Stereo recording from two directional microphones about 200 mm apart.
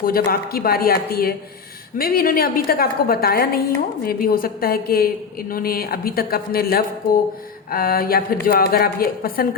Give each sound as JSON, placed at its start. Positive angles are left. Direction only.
{"t": 0.0, "sound": "a woman's voice", "side_deg": 45}